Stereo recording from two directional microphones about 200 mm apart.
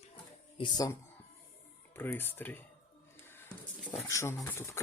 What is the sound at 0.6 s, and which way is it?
Speech, 20° left (ahead or behind).